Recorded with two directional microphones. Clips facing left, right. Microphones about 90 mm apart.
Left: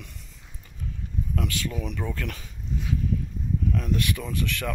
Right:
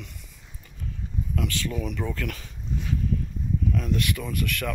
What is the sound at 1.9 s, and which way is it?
Speech, 20° left (ahead or behind).